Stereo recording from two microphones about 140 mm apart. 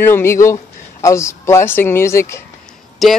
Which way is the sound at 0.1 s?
20° left (ahead or behind).